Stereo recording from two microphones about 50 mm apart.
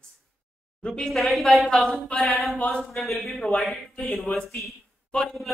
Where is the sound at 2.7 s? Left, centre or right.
Centre.